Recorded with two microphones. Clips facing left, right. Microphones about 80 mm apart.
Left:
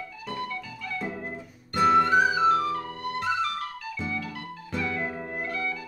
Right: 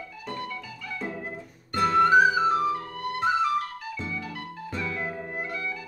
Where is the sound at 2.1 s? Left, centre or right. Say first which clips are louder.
Right 1 dB; centre.